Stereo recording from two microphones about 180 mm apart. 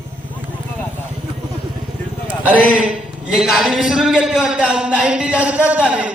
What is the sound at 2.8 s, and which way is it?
A man's voice, 5° right (ahead or behind).